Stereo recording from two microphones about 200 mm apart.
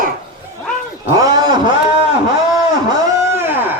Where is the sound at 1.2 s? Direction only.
20° right (ahead or behind).